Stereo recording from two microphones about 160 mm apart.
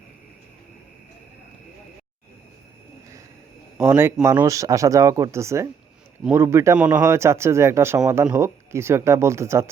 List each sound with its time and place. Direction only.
3.8 s speech: 15° right (ahead or behind)